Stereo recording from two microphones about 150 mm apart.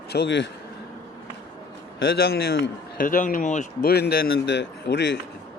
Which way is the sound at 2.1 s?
90° left.